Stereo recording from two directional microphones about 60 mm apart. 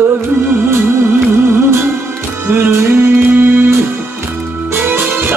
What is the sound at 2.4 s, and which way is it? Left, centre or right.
Music, right.